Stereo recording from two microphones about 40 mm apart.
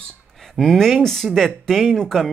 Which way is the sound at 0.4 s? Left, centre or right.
Centre.